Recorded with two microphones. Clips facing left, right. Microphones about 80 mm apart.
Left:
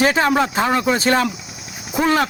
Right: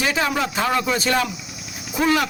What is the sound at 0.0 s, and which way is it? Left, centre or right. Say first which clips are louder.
Speech: left 6 dB; left.